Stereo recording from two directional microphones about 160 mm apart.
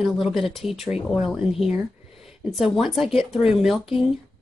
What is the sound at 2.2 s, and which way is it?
Speech, centre (ahead or behind).